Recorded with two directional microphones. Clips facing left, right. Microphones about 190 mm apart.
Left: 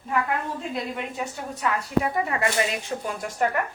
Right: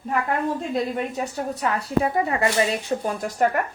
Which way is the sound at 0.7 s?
40° right (ahead or behind).